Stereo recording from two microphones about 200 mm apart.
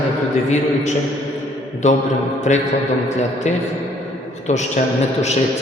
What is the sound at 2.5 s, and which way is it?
Speech, 35° left (ahead or behind).